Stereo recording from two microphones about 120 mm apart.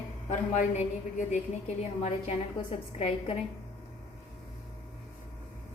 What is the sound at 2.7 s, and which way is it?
Speech, 55° left (ahead or behind).